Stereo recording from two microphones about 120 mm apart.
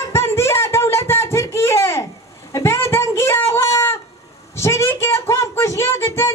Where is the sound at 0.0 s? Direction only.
20° left (ahead or behind).